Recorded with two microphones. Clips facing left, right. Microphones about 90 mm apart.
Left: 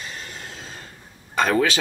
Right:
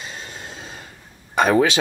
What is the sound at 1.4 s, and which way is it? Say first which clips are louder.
Speech: right 3 dB; 20° right (ahead or behind).